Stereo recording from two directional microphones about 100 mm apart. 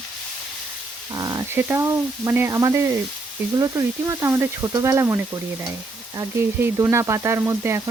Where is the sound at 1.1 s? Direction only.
35° right (ahead or behind).